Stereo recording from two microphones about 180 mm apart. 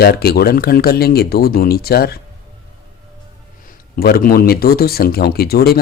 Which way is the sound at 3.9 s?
55° left (ahead or behind).